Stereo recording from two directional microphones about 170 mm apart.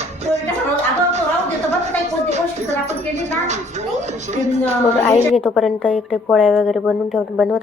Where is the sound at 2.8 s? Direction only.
40° right (ahead or behind).